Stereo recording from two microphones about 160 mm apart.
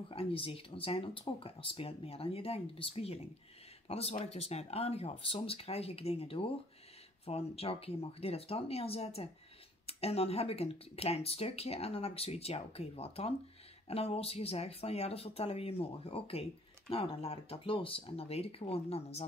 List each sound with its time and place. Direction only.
0.1 s speech: 35° left (ahead or behind)